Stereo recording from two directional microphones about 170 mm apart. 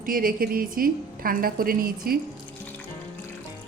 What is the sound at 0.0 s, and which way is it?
A woman's voice, 55° right (ahead or behind).